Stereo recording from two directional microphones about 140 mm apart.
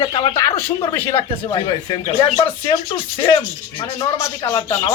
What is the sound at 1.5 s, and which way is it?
Speech, 35° left (ahead or behind).